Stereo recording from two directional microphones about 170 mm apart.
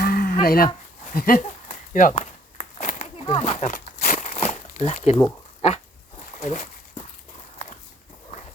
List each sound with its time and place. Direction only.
0.0 s a sound: 60° left (ahead or behind)
0.4 s speech: 60° left (ahead or behind)
1.6 s a sound: 50° left (ahead or behind)
3.8 s crumpling: 55° left (ahead or behind)
4.3 s crumpling: 40° left (ahead or behind)
5.6 s dog: 40° left (ahead or behind)